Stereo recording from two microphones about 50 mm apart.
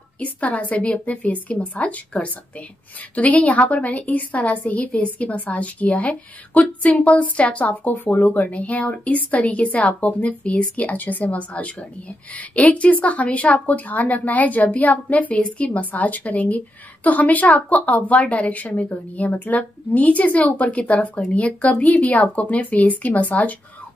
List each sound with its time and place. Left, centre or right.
0.2 s a woman's voice: left